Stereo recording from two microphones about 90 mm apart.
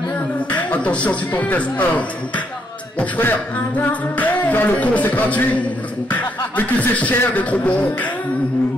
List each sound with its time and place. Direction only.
0.5 s singing: 15° left (ahead or behind)